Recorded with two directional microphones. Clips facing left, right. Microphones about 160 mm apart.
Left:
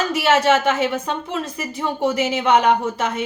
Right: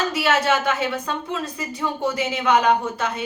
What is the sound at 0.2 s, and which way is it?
A woman's voice, 25° left (ahead or behind).